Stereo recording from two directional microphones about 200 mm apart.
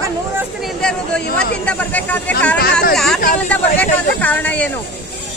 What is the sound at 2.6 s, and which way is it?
Speech, 50° left (ahead or behind).